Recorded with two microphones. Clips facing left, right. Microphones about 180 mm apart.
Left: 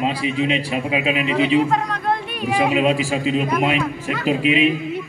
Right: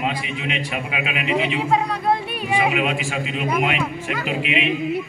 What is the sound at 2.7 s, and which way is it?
A man's voice, 35° left (ahead or behind).